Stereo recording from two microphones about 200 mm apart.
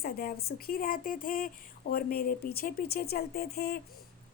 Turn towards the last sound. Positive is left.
turn(degrees=50)  # may be behind; listen again after turning